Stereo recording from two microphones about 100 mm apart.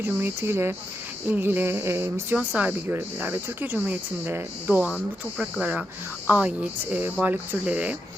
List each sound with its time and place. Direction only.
0.0 s speech: 25° right (ahead or behind)